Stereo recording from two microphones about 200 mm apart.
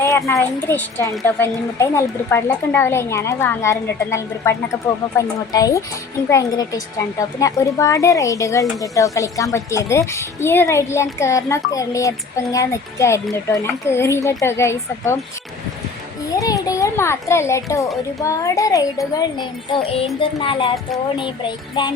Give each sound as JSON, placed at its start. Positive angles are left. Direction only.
{"t": 0.0, "sound": "a woman's voice", "side_deg": 15}
{"t": 16.3, "sound": "a sound", "side_deg": 15}
{"t": 18.2, "sound": "a woman's voice", "side_deg": 15}